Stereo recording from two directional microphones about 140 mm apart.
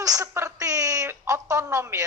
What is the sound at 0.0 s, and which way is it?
Speech, 25° right (ahead or behind).